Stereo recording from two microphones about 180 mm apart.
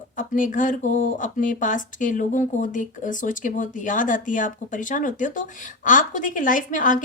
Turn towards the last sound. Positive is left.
turn(degrees=45)  # may be behind; listen again after turning